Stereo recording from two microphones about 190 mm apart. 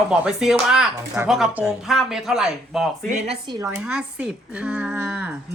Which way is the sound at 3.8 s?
5° right (ahead or behind).